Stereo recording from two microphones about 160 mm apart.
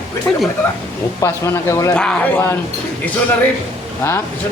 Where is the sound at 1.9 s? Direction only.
5° left (ahead or behind).